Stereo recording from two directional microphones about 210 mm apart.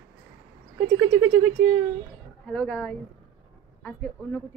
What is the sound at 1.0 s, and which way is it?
Speech, 5° right (ahead or behind).